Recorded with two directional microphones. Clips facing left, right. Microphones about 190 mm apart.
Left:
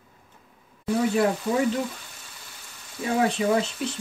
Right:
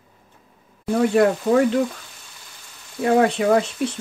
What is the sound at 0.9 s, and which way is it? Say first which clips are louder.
Speech: right 5 dB; 65° right (ahead or behind).